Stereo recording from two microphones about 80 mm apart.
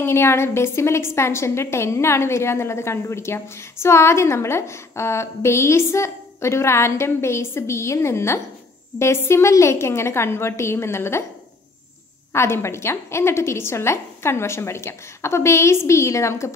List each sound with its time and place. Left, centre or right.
0.0 s a woman's voice: left
12.3 s a woman's voice: left